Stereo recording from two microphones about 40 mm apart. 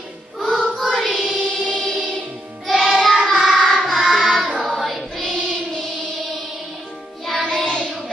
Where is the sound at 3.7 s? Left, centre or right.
Centre.